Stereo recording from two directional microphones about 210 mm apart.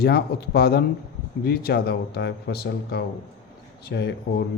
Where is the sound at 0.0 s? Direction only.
50° left (ahead or behind).